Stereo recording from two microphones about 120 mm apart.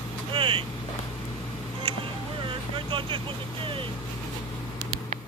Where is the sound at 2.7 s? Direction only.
45° right (ahead or behind).